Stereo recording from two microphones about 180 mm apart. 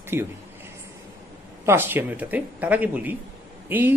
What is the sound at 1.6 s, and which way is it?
A man's voice, 10° right (ahead or behind).